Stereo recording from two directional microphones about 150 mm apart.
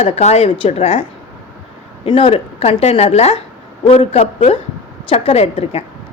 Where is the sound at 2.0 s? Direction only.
35° left (ahead or behind).